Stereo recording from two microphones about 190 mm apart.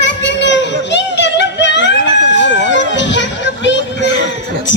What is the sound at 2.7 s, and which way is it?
Children playing, 70° left (ahead or behind).